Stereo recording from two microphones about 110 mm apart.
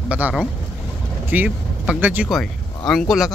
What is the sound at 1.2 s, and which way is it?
Vehicle, 15° right (ahead or behind).